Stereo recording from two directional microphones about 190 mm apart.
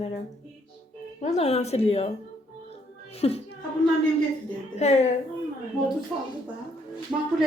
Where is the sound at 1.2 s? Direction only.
35° left (ahead or behind).